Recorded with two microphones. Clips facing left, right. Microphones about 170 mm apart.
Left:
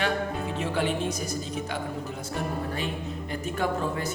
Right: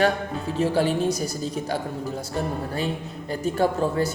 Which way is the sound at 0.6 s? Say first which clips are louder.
Right 7 dB; 35° right (ahead or behind).